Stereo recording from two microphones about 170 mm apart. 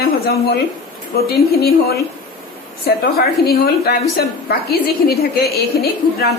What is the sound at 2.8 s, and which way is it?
A woman's voice, 60° left (ahead or behind).